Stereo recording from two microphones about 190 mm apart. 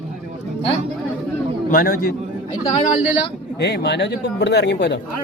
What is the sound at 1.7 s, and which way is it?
Speech, 50° left (ahead or behind).